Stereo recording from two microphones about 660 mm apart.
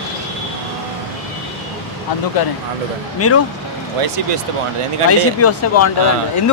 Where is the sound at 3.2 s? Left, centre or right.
Left.